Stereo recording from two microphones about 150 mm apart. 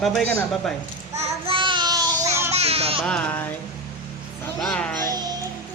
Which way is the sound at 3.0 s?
10° left (ahead or behind).